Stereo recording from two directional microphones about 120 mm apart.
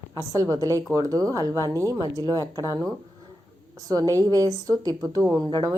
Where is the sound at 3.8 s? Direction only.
30° right (ahead or behind).